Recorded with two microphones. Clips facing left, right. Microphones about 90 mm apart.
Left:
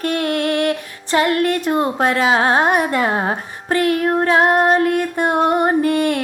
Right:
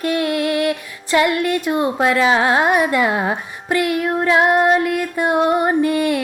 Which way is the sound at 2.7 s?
40° left (ahead or behind).